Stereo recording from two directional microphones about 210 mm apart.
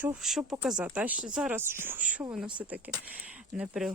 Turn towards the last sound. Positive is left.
turn(degrees=0)  # may be behind; listen again after turning